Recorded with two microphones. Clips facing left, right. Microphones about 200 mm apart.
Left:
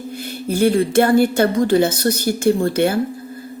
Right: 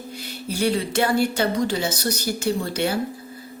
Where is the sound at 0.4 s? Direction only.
50° left (ahead or behind).